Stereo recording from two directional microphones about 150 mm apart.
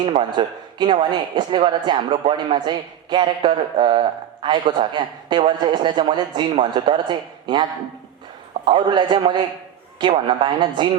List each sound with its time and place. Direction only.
0.1 s speech: 35° right (ahead or behind)